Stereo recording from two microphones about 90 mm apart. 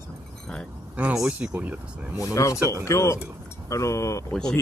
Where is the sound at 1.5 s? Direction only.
20° right (ahead or behind).